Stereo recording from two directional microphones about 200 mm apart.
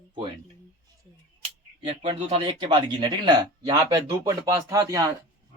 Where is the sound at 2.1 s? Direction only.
25° right (ahead or behind).